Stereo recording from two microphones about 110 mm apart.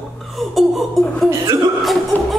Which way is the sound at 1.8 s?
Centre (ahead or behind).